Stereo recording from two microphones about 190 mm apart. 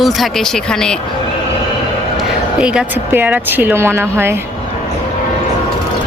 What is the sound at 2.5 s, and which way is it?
Speech, 5° right (ahead or behind).